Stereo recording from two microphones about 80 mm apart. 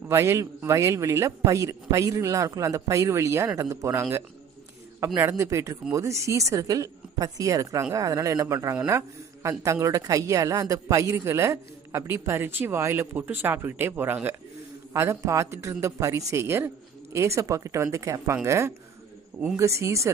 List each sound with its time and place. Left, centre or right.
0.1 s a man's voice: right